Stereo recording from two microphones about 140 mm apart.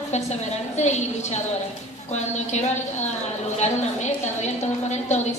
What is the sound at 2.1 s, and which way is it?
Speech, 55° left (ahead or behind).